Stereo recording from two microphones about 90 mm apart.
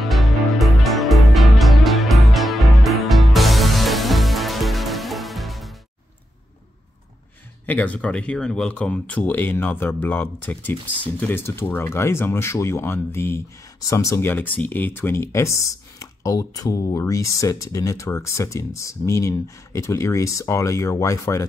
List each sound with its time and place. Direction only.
0.0 s music: centre (ahead or behind)
7.6 s speech: 15° left (ahead or behind); by 21.5 s 35° left (ahead or behind)